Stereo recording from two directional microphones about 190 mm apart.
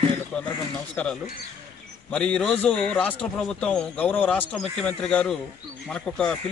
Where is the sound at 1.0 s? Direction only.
10° left (ahead or behind).